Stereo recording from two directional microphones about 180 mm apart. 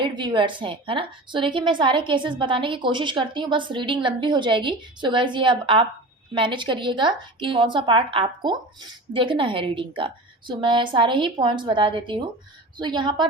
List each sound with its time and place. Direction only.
0.0 s a woman's voice: 25° right (ahead or behind)